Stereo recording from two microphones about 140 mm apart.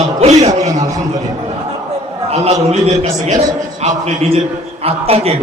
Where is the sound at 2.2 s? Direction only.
50° right (ahead or behind).